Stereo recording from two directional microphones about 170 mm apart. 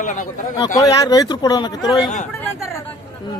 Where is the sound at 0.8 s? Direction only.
20° left (ahead or behind).